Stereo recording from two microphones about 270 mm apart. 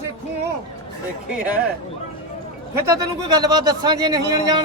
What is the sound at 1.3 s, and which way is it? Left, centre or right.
Speech, centre.